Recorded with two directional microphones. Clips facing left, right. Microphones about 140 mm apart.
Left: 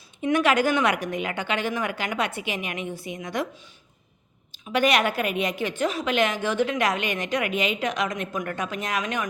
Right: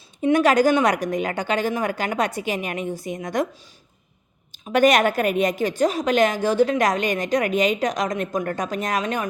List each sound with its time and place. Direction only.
0.2 s a woman's voice: 40° right (ahead or behind)
4.6 s a woman's voice: 45° right (ahead or behind)